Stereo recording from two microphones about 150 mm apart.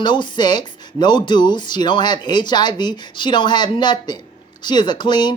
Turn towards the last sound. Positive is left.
turn(degrees=30)  # may be behind; listen again after turning